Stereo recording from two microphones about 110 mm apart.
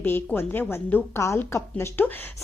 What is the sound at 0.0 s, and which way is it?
A woman's voice, 20° left (ahead or behind).